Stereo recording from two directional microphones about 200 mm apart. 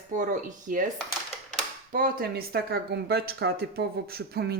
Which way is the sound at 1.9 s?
45° right (ahead or behind).